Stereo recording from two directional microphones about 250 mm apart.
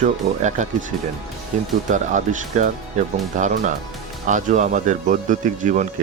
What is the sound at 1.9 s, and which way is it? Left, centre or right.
Speech, right.